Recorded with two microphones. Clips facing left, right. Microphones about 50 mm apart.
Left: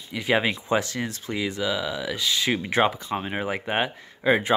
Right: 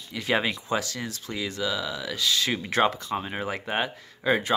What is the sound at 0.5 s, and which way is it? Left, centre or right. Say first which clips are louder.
Speech: left 4 dB; left.